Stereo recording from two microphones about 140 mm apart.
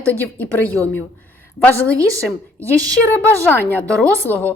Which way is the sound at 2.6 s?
25° right (ahead or behind).